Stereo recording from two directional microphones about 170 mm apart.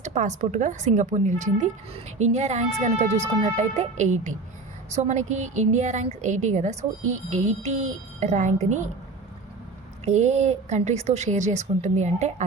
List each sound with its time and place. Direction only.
0.0 s a woman's voice: 45° right (ahead or behind)
10.1 s a woman's voice: 40° right (ahead or behind)